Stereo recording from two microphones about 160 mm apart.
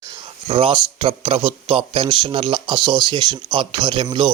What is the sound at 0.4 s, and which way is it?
A man's voice, 35° right (ahead or behind).